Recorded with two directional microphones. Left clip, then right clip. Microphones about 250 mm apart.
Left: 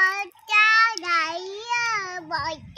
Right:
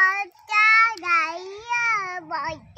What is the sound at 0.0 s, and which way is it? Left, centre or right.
Child singing, centre.